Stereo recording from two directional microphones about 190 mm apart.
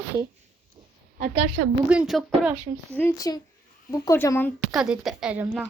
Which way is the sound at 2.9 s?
10° left (ahead or behind).